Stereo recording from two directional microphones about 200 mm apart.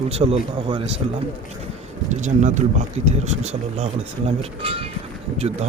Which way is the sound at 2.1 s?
35° right (ahead or behind).